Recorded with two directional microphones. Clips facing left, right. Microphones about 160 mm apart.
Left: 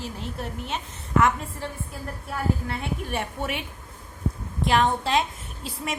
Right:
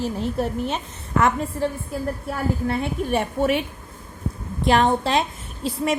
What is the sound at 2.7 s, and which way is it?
Speech, 35° right (ahead or behind).